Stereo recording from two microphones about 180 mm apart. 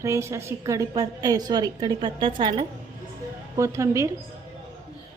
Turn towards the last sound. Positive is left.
turn(degrees=-15)  # may be behind; listen again after turning